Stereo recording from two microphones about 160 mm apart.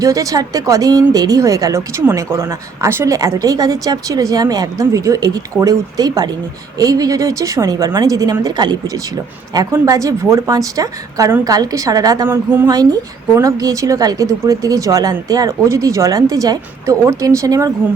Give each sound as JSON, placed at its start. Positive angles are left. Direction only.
{"t": 0.0, "sound": "speech", "side_deg": -20}